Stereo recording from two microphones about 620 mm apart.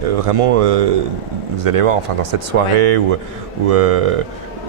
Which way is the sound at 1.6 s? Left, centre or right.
Right.